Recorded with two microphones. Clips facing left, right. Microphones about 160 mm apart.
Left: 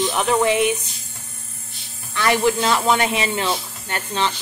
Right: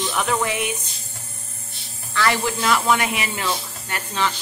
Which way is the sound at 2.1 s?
20° left (ahead or behind).